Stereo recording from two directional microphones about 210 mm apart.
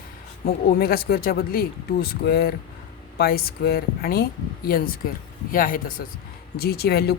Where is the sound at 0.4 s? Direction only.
45° left (ahead or behind).